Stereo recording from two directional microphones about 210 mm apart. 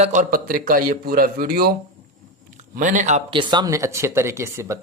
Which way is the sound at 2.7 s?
40° right (ahead or behind).